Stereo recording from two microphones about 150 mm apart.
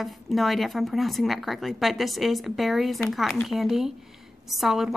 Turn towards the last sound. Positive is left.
turn(degrees=0)  # may be behind; listen again after turning